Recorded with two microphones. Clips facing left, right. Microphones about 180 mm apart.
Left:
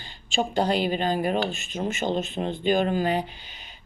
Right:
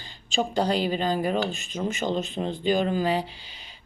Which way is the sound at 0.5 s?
35° right (ahead or behind).